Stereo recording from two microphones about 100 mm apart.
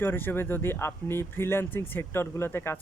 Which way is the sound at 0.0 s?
20° left (ahead or behind).